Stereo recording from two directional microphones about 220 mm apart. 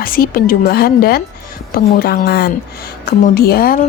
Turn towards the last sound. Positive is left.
turn(degrees=40)  # may be behind; listen again after turning